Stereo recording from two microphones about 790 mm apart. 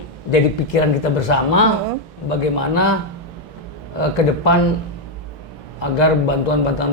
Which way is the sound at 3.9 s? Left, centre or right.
Left.